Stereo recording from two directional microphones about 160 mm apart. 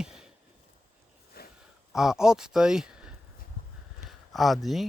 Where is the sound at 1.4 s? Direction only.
75° left (ahead or behind).